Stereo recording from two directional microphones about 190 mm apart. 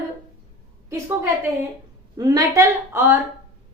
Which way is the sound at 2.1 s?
20° right (ahead or behind).